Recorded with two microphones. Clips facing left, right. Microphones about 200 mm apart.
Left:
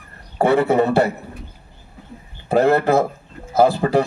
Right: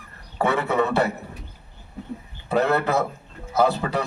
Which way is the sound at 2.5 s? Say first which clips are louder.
Left 6 dB; 50° left (ahead or behind).